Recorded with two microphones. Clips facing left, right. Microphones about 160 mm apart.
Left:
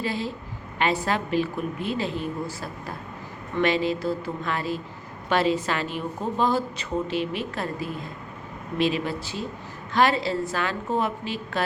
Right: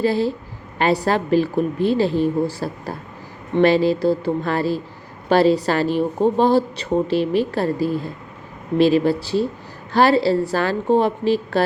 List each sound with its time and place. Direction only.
0.0 s a woman's voice: 35° right (ahead or behind)